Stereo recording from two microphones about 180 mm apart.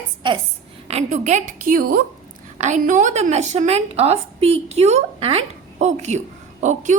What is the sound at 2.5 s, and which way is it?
A woman's voice, 40° right (ahead or behind).